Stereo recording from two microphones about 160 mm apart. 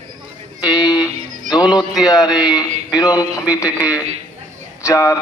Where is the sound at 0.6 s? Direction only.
25° left (ahead or behind).